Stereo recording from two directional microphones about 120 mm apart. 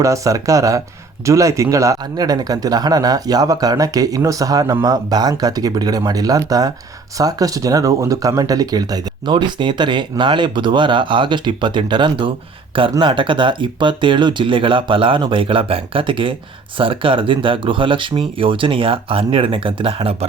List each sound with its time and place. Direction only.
0.0 s speech: 25° right (ahead or behind); by 20.1 s 45° right (ahead or behind)